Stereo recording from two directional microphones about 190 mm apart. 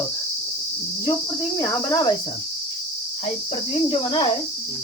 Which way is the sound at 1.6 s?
20° left (ahead or behind).